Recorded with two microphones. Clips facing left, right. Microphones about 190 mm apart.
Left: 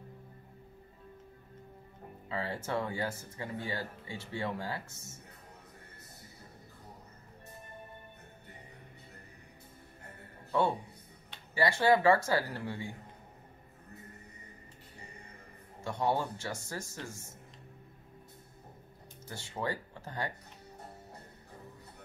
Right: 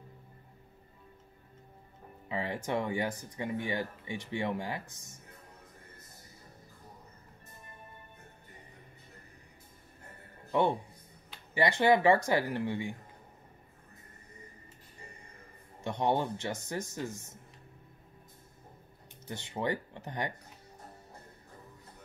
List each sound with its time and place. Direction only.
2.2 s speech: 15° right (ahead or behind)
10.5 s a man's voice: 20° right (ahead or behind)
15.8 s speech: 20° right (ahead or behind)
19.2 s speech: 20° right (ahead or behind)